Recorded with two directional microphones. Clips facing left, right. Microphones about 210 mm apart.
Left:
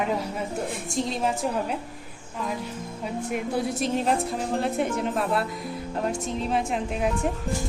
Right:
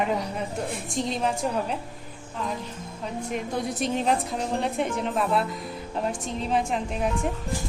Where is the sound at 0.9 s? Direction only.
Centre (ahead or behind).